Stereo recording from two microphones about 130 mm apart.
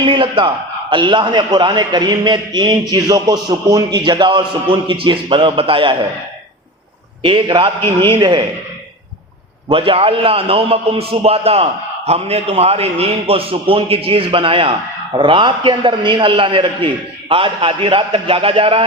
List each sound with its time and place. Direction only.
0.0 s a man's voice: 40° right (ahead or behind)
7.2 s a man's voice: 40° right (ahead or behind)
9.6 s a man's voice: 45° right (ahead or behind)